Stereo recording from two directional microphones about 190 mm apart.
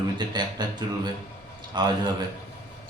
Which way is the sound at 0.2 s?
25° right (ahead or behind).